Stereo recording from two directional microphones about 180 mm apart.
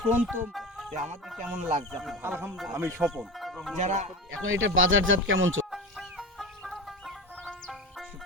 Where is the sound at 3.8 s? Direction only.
40° right (ahead or behind).